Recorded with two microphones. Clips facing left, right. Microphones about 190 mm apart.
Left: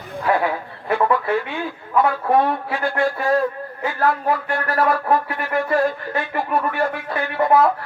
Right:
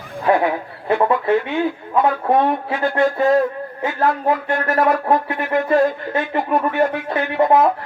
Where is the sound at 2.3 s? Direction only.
20° right (ahead or behind).